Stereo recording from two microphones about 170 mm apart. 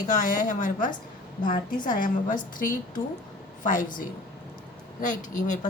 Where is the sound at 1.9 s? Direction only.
50° left (ahead or behind).